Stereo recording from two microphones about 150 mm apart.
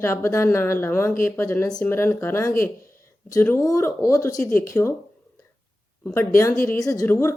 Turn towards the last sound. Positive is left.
turn(degrees=20)  # may be behind; listen again after turning